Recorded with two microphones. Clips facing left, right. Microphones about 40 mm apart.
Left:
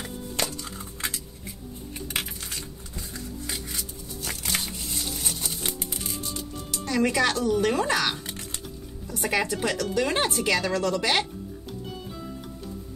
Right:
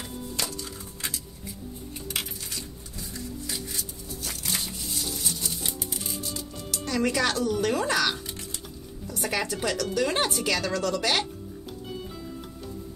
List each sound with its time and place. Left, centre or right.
0.4 s music: left
4.2 s music: left
6.7 s speech: centre